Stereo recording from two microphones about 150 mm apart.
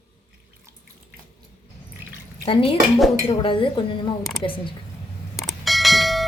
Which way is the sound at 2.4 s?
35° left (ahead or behind).